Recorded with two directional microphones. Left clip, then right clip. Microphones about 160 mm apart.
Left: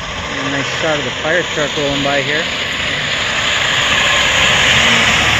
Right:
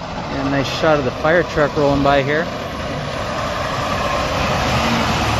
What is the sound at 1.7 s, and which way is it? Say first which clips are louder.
Vehicle: right 2 dB; 5° right (ahead or behind).